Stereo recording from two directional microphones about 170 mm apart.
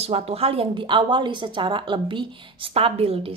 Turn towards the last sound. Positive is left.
turn(degrees=-35)  # may be behind; listen again after turning